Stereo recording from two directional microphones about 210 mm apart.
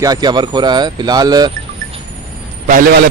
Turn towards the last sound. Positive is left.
turn(degrees=-45)  # may be behind; listen again after turning